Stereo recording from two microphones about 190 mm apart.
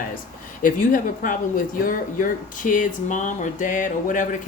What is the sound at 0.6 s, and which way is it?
Speech, 45° left (ahead or behind).